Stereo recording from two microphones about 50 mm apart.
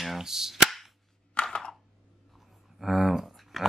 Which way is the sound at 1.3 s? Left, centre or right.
Centre.